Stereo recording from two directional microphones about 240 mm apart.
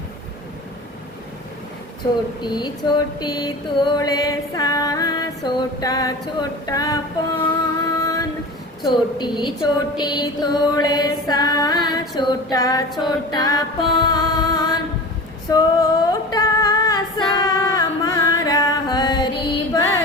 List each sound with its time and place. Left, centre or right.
2.4 s female singing: centre
7.5 s music: centre
8.9 s a woman's voice: centre
10.0 s female singing: centre
13.0 s music: centre
15.4 s female singing: centre